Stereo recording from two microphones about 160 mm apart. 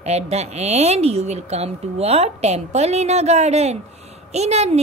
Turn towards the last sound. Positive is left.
turn(degrees=-40)  # may be behind; listen again after turning